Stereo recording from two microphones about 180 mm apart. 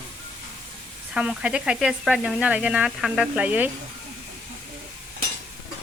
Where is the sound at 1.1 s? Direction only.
5° right (ahead or behind).